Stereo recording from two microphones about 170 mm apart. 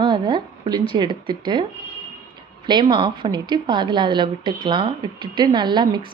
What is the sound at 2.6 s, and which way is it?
Speech, 25° right (ahead or behind).